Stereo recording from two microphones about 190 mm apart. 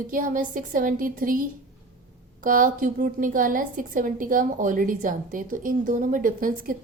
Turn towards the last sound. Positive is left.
turn(degrees=-45)  # may be behind; listen again after turning